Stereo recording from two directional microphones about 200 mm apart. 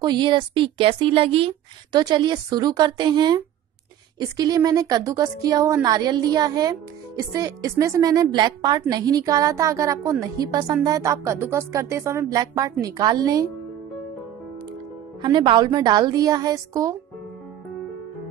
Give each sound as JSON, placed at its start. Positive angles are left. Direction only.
{"t": 0.0, "sound": "a woman's voice", "side_deg": -20}
{"t": 15.2, "sound": "a woman's voice", "side_deg": -20}